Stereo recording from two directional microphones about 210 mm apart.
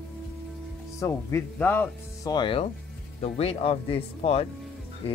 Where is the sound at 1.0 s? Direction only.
15° left (ahead or behind).